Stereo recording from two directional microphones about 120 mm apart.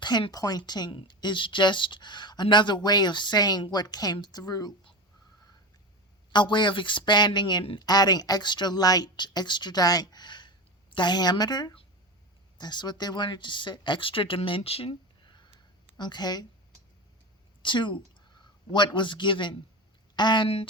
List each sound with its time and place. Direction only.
0.0 s speech: 35° left (ahead or behind)
6.3 s speech: 40° left (ahead or behind)
7.8 s speech: 35° left (ahead or behind); by 15.4 s 55° left (ahead or behind)
16.0 s speech: 35° left (ahead or behind)
17.6 s a woman's voice: 40° left (ahead or behind)